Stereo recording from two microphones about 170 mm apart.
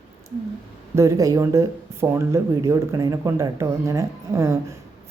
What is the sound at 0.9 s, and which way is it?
Speech, 20° right (ahead or behind).